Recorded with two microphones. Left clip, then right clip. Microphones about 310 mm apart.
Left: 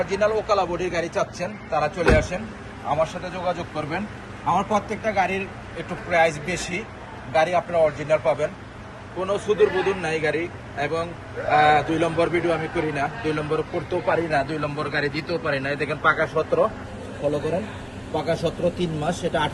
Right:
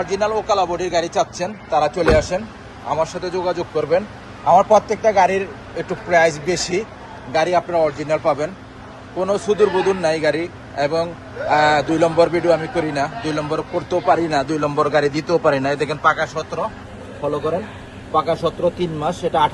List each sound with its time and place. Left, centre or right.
0.0 s a man's voice: centre
16.1 s a man's voice: centre